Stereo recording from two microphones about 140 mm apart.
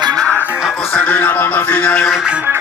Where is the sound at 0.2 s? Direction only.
10° left (ahead or behind).